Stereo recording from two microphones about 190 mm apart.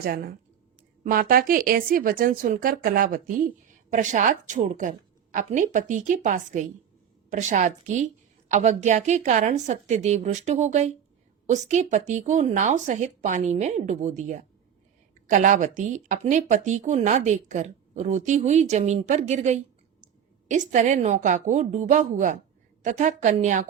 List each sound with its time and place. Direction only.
1.1 s speech: 50° right (ahead or behind)